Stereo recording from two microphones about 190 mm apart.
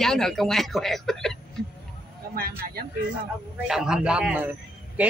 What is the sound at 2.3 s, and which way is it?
Speech, 50° right (ahead or behind).